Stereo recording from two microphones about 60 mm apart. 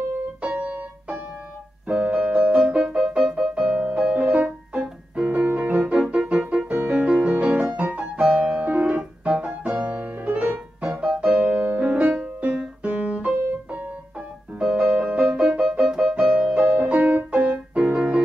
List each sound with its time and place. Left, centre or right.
0.4 s music: right
1.9 s keyboard: centre
6.0 s music: centre
8.4 s piano: centre
10.8 s music: right
15.7 s keyboard: centre